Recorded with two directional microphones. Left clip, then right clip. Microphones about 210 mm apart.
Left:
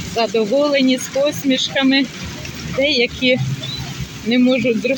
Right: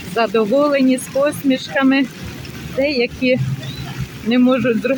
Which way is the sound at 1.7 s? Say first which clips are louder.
Right 2 dB; 35° right (ahead or behind).